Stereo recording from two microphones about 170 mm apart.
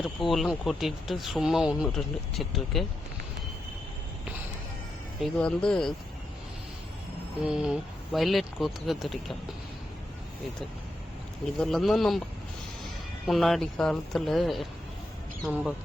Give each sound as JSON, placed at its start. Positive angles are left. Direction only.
{"t": 0.0, "sound": "speech", "side_deg": 0}
{"t": 5.2, "sound": "speech", "side_deg": 5}
{"t": 7.4, "sound": "speech", "side_deg": -5}
{"t": 11.6, "sound": "speech", "side_deg": 0}
{"t": 13.2, "sound": "speech", "side_deg": 0}